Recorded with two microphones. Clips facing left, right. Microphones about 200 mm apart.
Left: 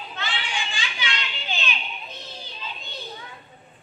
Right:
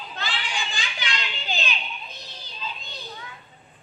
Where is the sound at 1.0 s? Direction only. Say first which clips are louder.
Right 1 dB; 40° right (ahead or behind).